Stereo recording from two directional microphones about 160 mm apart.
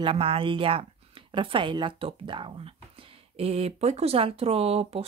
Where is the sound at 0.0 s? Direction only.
35° right (ahead or behind).